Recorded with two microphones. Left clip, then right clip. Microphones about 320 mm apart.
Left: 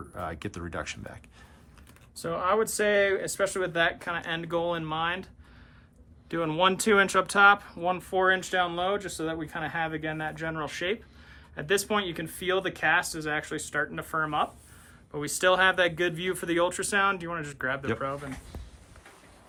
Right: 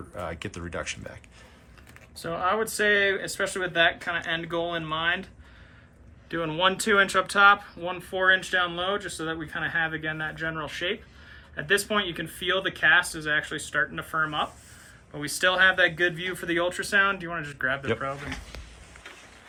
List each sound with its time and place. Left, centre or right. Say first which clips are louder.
0.1 s speech: right 2 dB; centre
2.2 s speech: even; left